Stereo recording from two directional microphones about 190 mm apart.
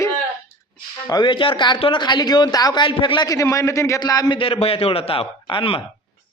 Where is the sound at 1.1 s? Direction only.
25° left (ahead or behind).